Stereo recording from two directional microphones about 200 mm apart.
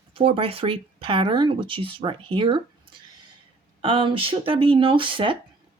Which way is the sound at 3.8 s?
25° right (ahead or behind).